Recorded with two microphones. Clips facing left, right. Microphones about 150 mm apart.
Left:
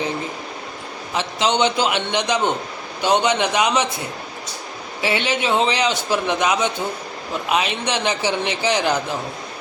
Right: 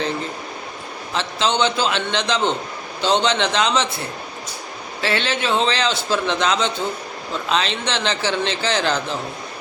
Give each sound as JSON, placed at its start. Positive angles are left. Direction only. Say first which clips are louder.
{"t": 1.1, "sound": "a man's voice", "louder": "left 1 dB", "side_deg": 15}